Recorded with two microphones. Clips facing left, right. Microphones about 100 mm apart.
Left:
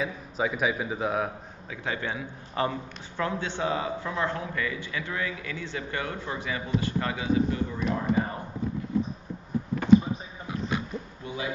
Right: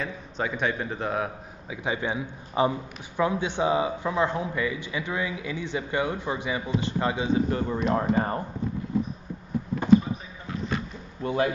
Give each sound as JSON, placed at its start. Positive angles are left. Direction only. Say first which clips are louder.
{"t": 0.0, "sound": "a man's voice", "louder": "left 2 dB", "side_deg": 5}
{"t": 1.7, "sound": "a man's voice", "louder": "right 3 dB", "side_deg": -15}
{"t": 7.5, "sound": "speech", "louder": "right 4 dB", "side_deg": -50}
{"t": 11.2, "sound": "a man's voice", "louder": "right 10 dB", "side_deg": -55}